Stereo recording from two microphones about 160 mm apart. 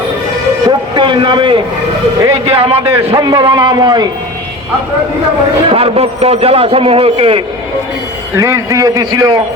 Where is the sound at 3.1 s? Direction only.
25° right (ahead or behind).